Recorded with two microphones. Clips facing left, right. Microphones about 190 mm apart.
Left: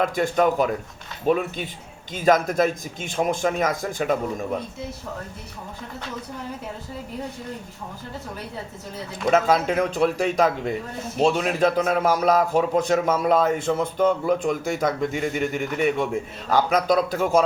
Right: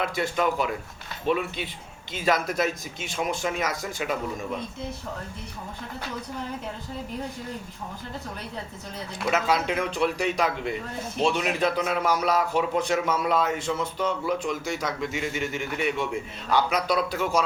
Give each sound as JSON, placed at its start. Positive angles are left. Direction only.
{"t": 0.0, "sound": "a man's voice", "side_deg": 45}
{"t": 9.3, "sound": "a man's voice", "side_deg": 45}